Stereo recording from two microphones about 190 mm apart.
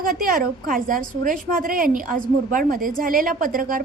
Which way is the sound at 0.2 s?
45° right (ahead or behind).